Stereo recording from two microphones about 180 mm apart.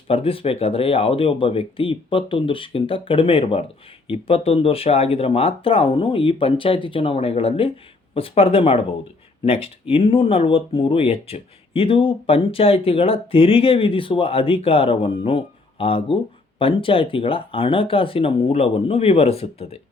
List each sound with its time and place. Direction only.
0.1 s speech: 30° left (ahead or behind)
9.9 s speech: 30° left (ahead or behind)